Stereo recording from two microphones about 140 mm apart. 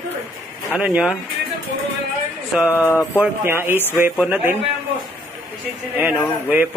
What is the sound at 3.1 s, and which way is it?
Speech, 15° right (ahead or behind).